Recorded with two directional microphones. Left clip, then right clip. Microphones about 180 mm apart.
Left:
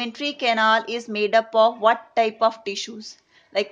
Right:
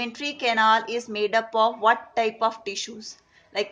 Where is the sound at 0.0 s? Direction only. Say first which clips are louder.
Left 2 dB; 55° left (ahead or behind).